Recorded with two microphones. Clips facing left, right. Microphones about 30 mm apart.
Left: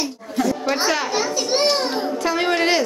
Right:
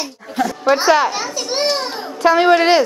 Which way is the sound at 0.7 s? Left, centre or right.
Centre.